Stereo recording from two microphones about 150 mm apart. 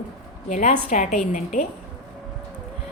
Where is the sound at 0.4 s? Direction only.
50° left (ahead or behind).